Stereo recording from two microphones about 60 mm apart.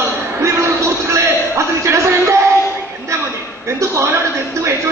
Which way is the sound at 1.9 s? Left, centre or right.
Right.